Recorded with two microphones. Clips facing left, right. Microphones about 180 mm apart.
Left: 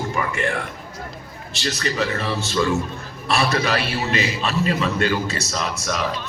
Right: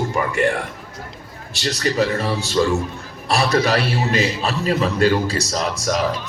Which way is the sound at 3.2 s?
35° right (ahead or behind).